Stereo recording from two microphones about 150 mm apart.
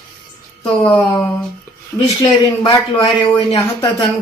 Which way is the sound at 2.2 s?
35° left (ahead or behind).